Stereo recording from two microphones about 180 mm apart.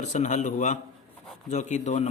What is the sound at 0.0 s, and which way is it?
A man's voice, 40° left (ahead or behind).